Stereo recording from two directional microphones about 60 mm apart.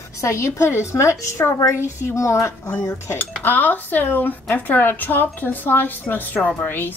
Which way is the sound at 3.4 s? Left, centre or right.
Left.